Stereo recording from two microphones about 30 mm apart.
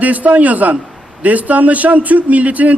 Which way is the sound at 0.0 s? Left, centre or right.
Right.